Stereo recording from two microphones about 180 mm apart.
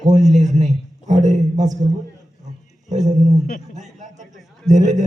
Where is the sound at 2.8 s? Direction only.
40° right (ahead or behind).